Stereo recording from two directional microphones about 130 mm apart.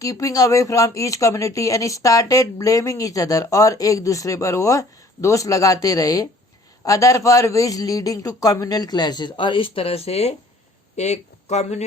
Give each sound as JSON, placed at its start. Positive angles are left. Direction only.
{"t": 0.0, "sound": "speech", "side_deg": 25}